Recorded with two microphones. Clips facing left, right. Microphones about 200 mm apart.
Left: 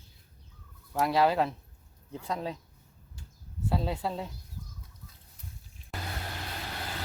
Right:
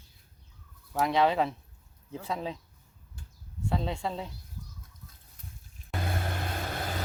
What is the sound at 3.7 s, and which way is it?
Speech, 5° left (ahead or behind).